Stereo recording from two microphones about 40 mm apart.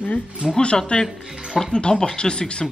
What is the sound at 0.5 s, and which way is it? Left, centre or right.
Speech, left.